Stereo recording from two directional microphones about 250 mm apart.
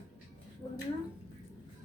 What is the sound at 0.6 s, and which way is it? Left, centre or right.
Speech, centre.